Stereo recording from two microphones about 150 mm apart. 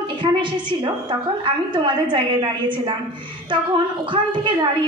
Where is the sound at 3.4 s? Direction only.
30° right (ahead or behind).